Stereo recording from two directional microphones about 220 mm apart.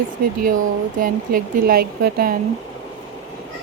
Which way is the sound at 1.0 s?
40° right (ahead or behind).